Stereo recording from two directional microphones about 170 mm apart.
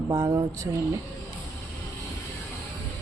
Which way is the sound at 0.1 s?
25° right (ahead or behind).